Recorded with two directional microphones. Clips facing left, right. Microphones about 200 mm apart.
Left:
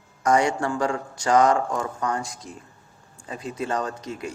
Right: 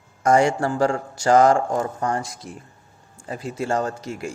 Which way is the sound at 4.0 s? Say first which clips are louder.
Right 2 dB; 10° right (ahead or behind).